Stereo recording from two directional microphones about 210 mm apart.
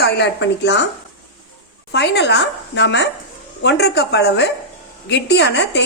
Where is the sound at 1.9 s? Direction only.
55° left (ahead or behind).